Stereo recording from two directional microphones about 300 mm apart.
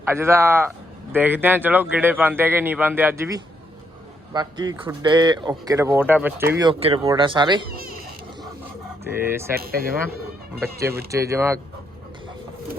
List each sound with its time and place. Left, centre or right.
0.1 s speech: centre
7.7 s a sound: right
9.0 s speech: centre
9.6 s speech: right
10.6 s speech: centre